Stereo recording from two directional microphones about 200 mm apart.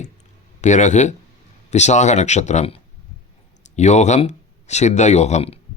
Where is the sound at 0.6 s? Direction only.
35° left (ahead or behind).